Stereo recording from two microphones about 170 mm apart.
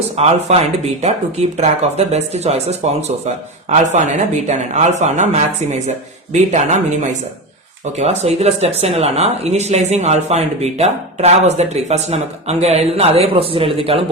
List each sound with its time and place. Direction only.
0.2 s speech: 40° right (ahead or behind)